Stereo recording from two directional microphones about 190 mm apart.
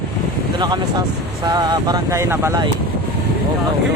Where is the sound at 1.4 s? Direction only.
20° right (ahead or behind).